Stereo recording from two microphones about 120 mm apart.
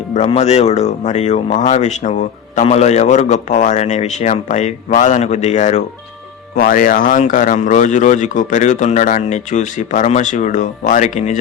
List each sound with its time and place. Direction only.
0.3 s speech: 65° left (ahead or behind); by 2.1 s 90° left
2.6 s speech: 65° left (ahead or behind)
6.7 s speech: 90° left